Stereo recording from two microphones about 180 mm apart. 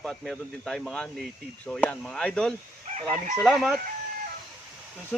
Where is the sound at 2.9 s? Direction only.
40° right (ahead or behind).